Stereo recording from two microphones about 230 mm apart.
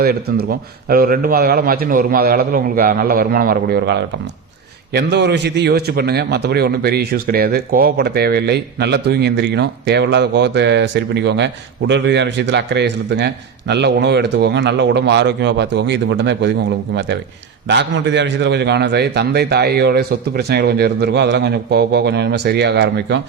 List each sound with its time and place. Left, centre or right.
0.0 s a man's voice: right